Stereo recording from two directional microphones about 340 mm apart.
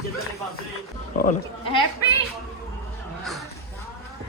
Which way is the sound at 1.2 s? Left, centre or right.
Centre.